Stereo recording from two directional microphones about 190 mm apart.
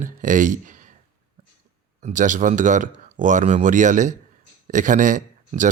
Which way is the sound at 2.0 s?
40° right (ahead or behind).